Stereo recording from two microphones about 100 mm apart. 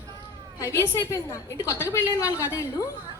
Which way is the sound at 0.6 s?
25° left (ahead or behind).